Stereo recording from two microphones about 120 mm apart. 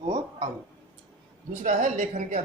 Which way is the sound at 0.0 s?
40° right (ahead or behind).